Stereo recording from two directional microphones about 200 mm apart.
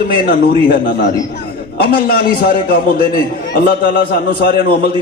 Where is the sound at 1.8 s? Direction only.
45° left (ahead or behind).